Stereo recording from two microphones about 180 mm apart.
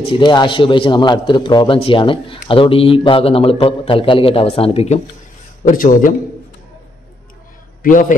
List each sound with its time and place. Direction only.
0.0 s a man's voice: 25° left (ahead or behind)
5.7 s speech: 50° left (ahead or behind)
7.8 s a man's voice: 45° left (ahead or behind)